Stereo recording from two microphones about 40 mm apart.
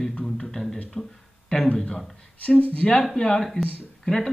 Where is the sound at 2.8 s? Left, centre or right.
Left.